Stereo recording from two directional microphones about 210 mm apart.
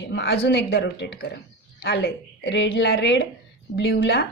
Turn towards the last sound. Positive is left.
turn(degrees=50)  # may be behind; listen again after turning